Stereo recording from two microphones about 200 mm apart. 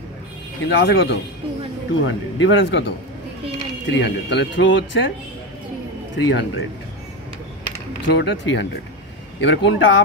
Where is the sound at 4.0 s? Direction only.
60° left (ahead or behind).